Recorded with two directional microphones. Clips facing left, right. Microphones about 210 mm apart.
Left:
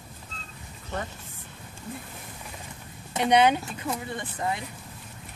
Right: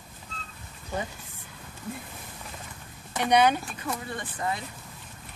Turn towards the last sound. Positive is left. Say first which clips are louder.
# left 1 dB
turn(degrees=20)  # may be behind; listen again after turning